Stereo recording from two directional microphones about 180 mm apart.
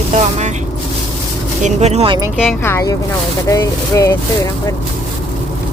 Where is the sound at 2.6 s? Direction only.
15° left (ahead or behind).